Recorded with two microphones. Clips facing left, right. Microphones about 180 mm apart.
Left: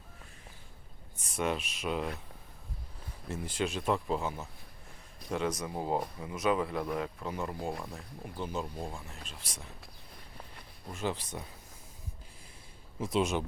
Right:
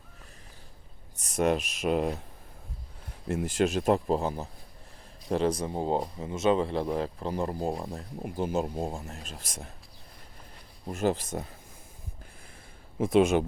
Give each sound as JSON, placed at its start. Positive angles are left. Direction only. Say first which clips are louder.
{"t": 1.1, "sound": "speech", "louder": "right 7 dB", "side_deg": -40}
{"t": 3.2, "sound": "speech", "louder": "right 8 dB", "side_deg": -50}
{"t": 8.2, "sound": "speech", "louder": "right 8 dB", "side_deg": -45}
{"t": 10.9, "sound": "speech", "louder": "right 8 dB", "side_deg": -45}
{"t": 13.0, "sound": "speech", "louder": "right 8 dB", "side_deg": -55}